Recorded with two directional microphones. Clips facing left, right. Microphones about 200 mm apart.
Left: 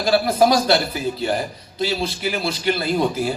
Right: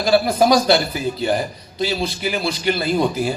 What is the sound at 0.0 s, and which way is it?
A man's voice, 15° right (ahead or behind).